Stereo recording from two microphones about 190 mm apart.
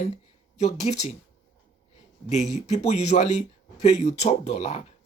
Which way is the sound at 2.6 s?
35° left (ahead or behind).